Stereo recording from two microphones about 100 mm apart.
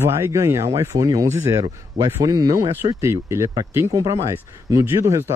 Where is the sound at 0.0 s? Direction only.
25° right (ahead or behind).